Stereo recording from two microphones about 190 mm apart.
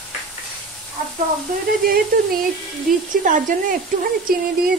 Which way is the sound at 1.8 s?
50° right (ahead or behind).